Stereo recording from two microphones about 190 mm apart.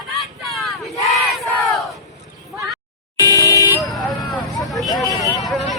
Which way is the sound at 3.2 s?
15° left (ahead or behind).